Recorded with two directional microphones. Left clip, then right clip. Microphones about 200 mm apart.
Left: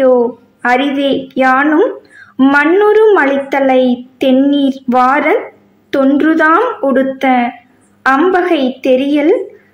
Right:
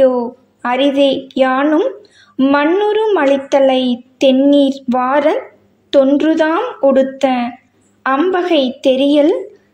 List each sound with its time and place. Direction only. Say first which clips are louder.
0.6 s a woman's voice: even; 20° right (ahead or behind)